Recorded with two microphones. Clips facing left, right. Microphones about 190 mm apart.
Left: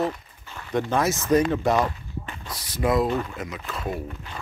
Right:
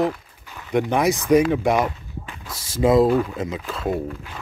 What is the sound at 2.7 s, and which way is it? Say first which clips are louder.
Speech: right 6 dB; 25° right (ahead or behind).